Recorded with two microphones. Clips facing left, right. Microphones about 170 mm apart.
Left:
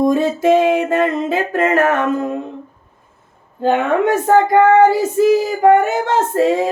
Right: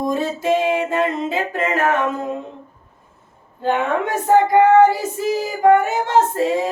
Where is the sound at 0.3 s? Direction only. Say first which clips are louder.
Left 5 dB; 50° left (ahead or behind).